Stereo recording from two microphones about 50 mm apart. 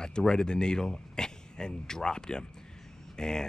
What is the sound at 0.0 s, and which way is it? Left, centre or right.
Speech, centre.